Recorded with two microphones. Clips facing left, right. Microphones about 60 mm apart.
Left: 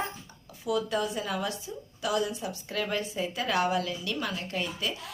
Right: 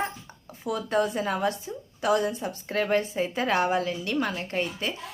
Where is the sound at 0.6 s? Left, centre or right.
Right.